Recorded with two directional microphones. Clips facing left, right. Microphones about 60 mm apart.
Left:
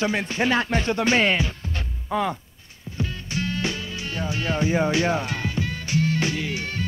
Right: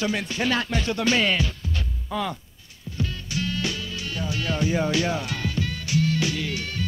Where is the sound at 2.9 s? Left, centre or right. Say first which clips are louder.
Left 1 dB; left.